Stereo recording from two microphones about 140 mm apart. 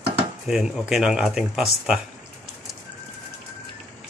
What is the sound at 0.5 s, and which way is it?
Speech, 5° right (ahead or behind).